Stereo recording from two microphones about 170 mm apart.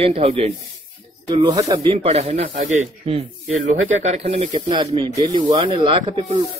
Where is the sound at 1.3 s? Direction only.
25° right (ahead or behind).